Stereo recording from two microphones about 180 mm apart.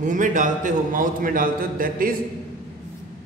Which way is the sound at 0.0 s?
45° right (ahead or behind).